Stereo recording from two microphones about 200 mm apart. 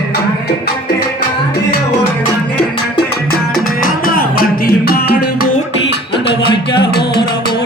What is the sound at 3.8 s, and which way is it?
Music, 45° left (ahead or behind).